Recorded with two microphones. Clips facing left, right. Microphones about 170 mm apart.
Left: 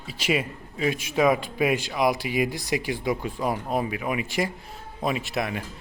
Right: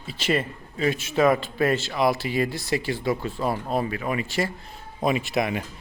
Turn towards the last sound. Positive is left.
turn(degrees=0)  # may be behind; listen again after turning